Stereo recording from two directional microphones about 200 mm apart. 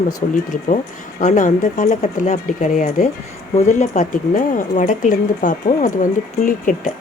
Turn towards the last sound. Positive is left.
turn(degrees=40)  # may be behind; listen again after turning